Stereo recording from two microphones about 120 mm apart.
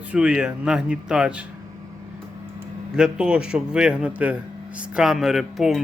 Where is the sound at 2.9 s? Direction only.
5° right (ahead or behind).